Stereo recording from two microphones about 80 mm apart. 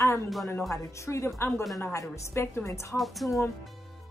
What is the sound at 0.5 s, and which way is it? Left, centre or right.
Speech, left.